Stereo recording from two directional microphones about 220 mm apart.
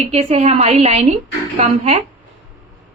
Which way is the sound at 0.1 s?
30° right (ahead or behind).